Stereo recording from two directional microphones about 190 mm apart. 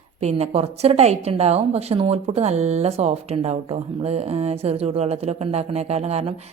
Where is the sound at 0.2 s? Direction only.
35° right (ahead or behind).